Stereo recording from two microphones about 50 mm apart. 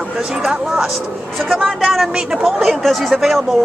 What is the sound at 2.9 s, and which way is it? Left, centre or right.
Speech, centre.